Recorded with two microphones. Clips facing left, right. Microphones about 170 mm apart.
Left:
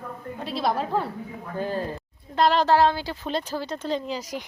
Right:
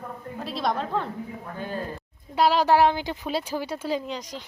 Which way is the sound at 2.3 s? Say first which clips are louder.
Even; 10° right (ahead or behind).